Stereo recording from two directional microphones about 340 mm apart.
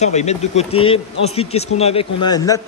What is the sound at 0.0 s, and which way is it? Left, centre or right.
A man's voice, centre.